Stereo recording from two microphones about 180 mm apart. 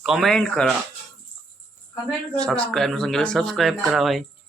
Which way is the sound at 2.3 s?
5° left (ahead or behind).